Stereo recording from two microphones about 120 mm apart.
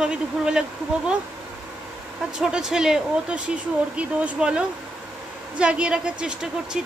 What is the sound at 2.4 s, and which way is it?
A woman's voice, 5° right (ahead or behind).